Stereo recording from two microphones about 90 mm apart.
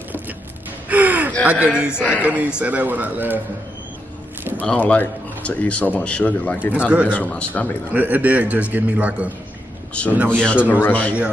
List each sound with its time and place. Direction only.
0.8 s gasp: 15° right (ahead or behind)
1.4 s a man's voice: 15° right (ahead or behind)
4.6 s a man's voice: 15° left (ahead or behind)
7.9 s a man's voice: 15° right (ahead or behind)
10.7 s a man's voice: 20° left (ahead or behind)